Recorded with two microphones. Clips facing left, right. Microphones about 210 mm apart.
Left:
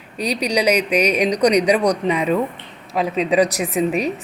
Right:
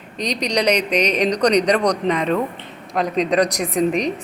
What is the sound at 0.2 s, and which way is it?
A woman's voice, 10° left (ahead or behind).